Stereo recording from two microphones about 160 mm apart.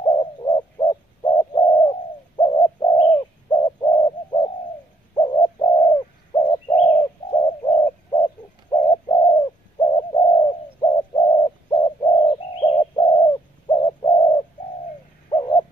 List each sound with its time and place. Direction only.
0.0 s bird: 30° left (ahead or behind)
1.6 s bird: 45° left (ahead or behind)
5.9 s bird: 30° left (ahead or behind)
8.1 s bird: 30° left (ahead or behind)